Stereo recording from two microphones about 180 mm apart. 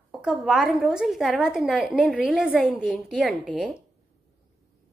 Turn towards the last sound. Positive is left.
turn(degrees=0)  # may be behind; listen again after turning